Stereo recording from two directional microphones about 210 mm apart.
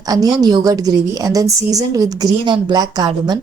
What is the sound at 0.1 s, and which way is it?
A woman's voice, 15° right (ahead or behind).